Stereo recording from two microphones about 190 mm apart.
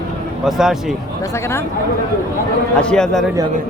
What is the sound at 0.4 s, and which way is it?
Speech, 5° right (ahead or behind).